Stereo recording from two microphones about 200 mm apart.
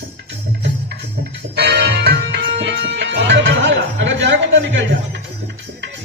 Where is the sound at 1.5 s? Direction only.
55° right (ahead or behind).